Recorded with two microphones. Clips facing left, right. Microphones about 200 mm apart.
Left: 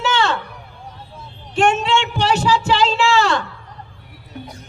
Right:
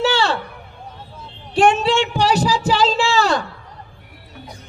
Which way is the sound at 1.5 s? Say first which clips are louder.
Right 2 dB; 35° right (ahead or behind).